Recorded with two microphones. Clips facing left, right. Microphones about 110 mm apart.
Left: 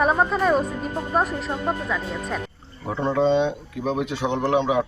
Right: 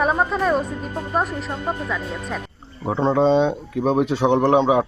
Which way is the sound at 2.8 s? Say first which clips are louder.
Right 3 dB; 25° right (ahead or behind).